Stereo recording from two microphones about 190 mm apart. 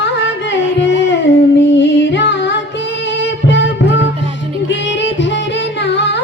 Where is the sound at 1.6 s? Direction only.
70° left (ahead or behind).